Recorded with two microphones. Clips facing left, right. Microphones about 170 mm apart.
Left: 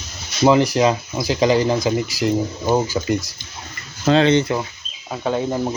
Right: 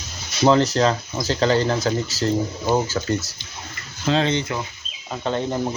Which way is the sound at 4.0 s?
65° left (ahead or behind).